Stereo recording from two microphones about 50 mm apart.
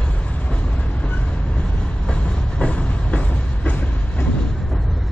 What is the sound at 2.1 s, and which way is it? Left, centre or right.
Train, left.